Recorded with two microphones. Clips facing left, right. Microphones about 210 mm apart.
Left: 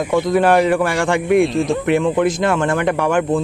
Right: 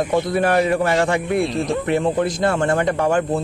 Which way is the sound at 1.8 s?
90° left.